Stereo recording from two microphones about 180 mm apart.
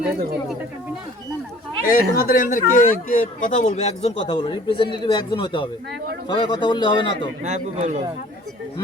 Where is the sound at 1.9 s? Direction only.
50° left (ahead or behind).